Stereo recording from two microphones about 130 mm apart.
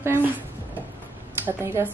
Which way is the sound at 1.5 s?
20° right (ahead or behind).